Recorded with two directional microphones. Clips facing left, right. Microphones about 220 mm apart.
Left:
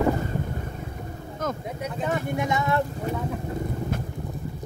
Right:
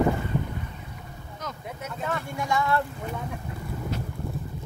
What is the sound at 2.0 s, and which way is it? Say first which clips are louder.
Vehicle: left 5 dB; 20° left (ahead or behind).